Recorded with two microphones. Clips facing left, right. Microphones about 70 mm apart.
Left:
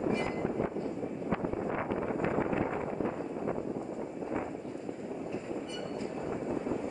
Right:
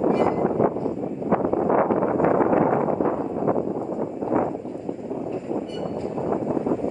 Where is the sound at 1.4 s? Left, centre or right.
Right.